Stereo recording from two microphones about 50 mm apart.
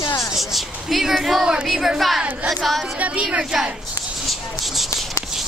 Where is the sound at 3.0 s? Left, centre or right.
Right.